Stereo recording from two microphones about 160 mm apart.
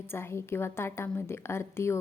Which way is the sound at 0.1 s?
15° left (ahead or behind).